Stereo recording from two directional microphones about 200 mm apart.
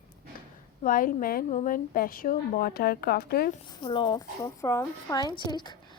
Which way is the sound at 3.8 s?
25° left (ahead or behind).